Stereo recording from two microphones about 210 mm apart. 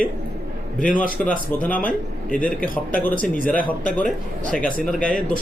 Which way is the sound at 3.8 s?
40° left (ahead or behind).